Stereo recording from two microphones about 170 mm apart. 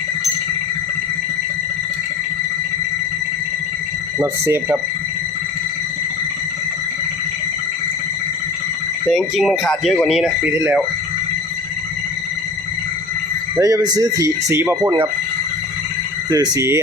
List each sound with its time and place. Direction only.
4.2 s speech: 15° right (ahead or behind)
9.0 s speech: centre (ahead or behind)
13.6 s speech: 20° right (ahead or behind)
16.3 s speech: 20° right (ahead or behind)